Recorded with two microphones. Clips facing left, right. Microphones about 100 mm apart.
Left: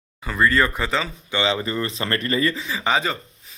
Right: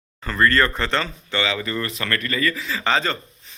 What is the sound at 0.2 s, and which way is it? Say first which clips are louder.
A man's voice: right 1 dB; 10° left (ahead or behind).